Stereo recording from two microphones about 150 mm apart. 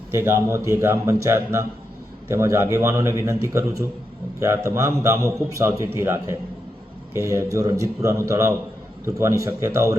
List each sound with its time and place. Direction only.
0.1 s a man's voice: 15° right (ahead or behind)